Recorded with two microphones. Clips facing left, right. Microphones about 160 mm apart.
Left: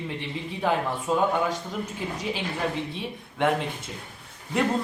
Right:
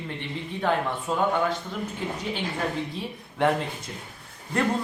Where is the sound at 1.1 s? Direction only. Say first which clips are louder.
Left 3 dB; 5° left (ahead or behind).